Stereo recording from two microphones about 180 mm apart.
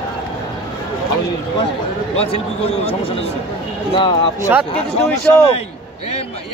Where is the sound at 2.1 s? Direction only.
35° left (ahead or behind).